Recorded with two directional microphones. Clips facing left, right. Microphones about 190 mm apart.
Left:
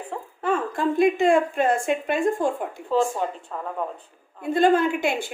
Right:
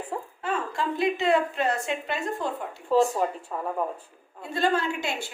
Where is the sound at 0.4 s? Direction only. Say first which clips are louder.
Left 6 dB; 50° left (ahead or behind).